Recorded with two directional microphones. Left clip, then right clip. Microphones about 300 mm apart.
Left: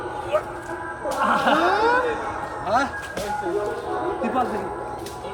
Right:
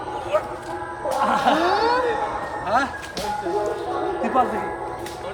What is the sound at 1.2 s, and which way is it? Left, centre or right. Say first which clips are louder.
Gargling: even; right.